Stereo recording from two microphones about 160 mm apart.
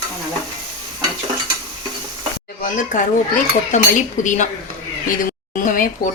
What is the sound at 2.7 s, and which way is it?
Speech, 55° left (ahead or behind).